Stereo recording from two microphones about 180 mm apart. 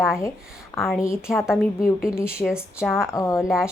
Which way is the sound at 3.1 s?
15° left (ahead or behind).